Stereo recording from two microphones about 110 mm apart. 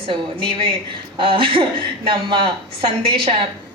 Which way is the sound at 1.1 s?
55° right (ahead or behind).